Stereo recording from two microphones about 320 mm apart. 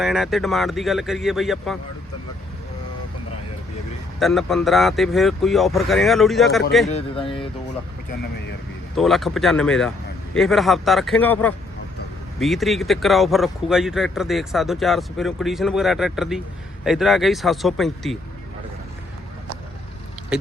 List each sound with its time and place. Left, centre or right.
0.0 s speech: centre
4.2 s speech: centre
6.9 s speech: centre
9.0 s speech: centre
20.3 s rodents: centre